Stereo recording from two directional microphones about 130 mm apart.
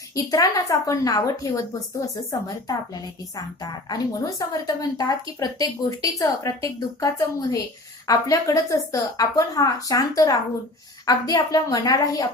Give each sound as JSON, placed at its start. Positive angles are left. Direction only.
{"t": 0.3, "sound": "a woman's voice", "side_deg": 25}